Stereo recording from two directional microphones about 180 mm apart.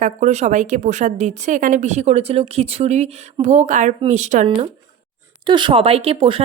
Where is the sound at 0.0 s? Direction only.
40° right (ahead or behind).